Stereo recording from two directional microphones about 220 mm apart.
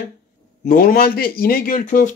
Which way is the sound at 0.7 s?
40° left (ahead or behind).